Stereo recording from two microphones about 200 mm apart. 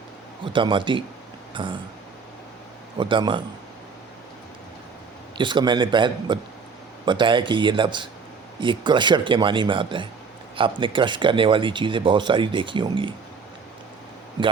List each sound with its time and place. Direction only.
0.4 s speech: 25° right (ahead or behind)
3.0 s speech: 25° right (ahead or behind)
5.4 s speech: 25° right (ahead or behind)